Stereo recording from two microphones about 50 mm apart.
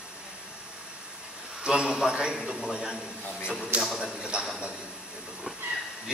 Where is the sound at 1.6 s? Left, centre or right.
Centre.